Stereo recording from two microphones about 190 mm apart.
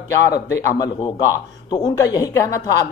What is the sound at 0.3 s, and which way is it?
Speech, 15° left (ahead or behind).